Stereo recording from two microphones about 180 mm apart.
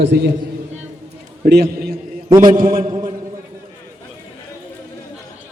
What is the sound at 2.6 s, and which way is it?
Speech, 45° right (ahead or behind).